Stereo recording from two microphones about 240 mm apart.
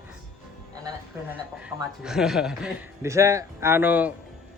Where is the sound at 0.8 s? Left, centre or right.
Centre.